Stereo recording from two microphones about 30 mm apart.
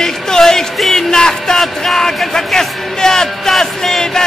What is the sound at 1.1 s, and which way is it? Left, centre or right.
Speech, left.